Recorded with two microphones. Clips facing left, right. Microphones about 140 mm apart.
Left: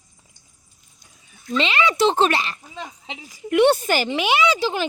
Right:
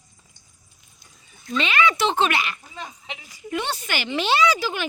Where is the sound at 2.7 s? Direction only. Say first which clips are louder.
Left 2 dB; 20° left (ahead or behind).